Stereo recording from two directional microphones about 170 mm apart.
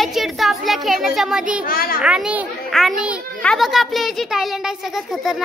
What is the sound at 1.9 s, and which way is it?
A child's voice, 5° right (ahead or behind).